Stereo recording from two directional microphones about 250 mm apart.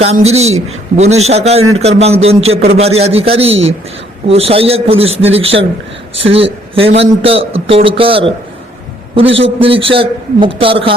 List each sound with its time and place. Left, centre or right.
0.0 s a man's voice: right
9.4 s a man's voice: right